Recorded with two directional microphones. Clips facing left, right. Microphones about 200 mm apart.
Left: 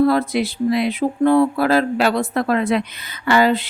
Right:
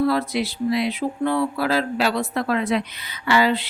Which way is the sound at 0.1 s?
50° left (ahead or behind).